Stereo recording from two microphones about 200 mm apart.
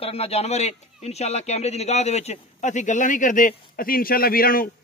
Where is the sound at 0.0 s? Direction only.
30° left (ahead or behind).